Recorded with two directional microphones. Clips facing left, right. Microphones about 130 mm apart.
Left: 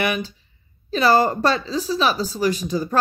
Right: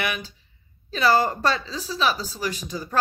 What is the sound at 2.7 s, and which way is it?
Speech, 45° left (ahead or behind).